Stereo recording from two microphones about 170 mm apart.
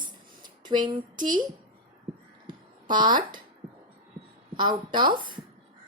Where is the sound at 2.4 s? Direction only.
25° right (ahead or behind).